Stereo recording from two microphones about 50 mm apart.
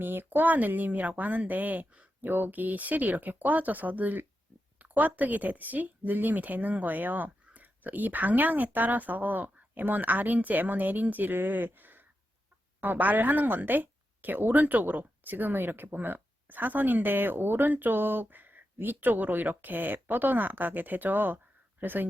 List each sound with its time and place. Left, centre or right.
0.0 s a woman's voice: right